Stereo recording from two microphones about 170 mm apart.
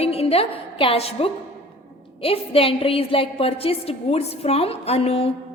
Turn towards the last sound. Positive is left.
turn(degrees=35)  # may be behind; listen again after turning